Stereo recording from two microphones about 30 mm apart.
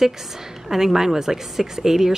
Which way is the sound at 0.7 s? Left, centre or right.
Centre.